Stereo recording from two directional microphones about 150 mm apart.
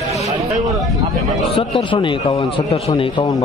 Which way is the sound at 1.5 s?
35° left (ahead or behind).